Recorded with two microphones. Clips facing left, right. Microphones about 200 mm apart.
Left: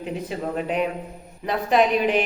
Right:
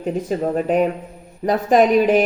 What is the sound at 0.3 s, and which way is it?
Speech, 45° right (ahead or behind).